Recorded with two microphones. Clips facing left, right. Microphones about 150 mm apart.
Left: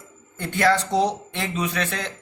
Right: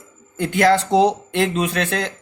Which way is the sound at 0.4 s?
90° right.